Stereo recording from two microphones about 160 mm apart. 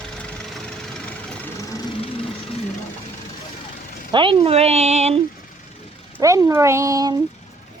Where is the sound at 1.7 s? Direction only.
30° left (ahead or behind).